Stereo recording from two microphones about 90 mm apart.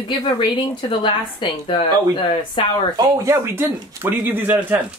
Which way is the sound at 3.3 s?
30° right (ahead or behind).